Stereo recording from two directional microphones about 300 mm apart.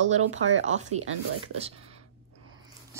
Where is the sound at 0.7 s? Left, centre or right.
Right.